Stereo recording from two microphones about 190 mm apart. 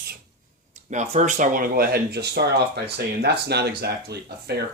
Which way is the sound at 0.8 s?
35° right (ahead or behind).